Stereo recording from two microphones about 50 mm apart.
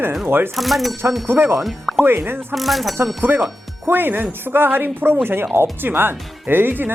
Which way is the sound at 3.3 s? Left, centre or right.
Right.